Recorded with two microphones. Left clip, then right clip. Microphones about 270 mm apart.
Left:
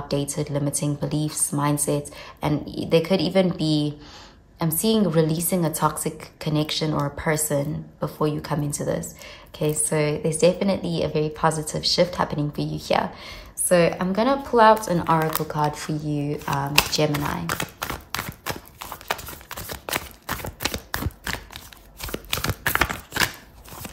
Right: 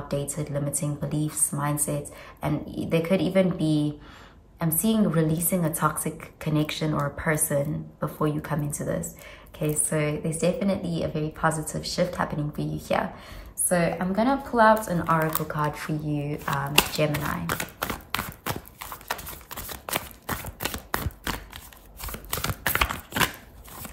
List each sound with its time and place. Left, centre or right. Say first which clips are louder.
0.1 s a woman's voice: left 4 dB; centre
17.6 s clip-clop: left 2 dB; centre